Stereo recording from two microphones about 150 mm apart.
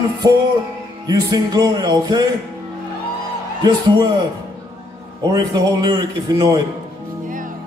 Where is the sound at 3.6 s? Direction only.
25° right (ahead or behind).